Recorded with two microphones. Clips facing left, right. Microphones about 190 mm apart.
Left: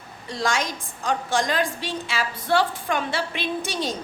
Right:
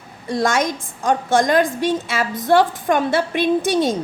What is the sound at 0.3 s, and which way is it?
A woman's voice, 50° right (ahead or behind).